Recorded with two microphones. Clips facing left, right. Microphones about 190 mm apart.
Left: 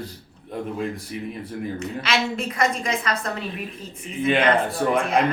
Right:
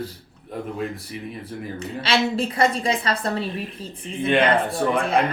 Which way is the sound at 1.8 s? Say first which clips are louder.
Right 4 dB; 30° right (ahead or behind).